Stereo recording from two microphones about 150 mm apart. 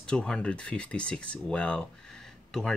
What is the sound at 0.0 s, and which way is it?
Speech, 5° left (ahead or behind).